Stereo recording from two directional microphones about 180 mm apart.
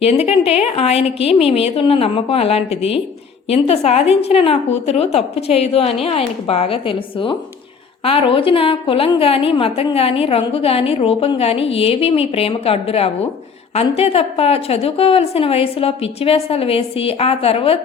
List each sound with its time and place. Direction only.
0.0 s a woman's voice: 35° left (ahead or behind)